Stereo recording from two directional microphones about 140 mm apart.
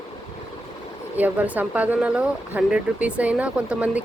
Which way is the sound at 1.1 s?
10° right (ahead or behind).